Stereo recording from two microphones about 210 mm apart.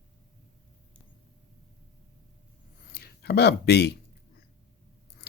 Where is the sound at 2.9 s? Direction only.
50° left (ahead or behind).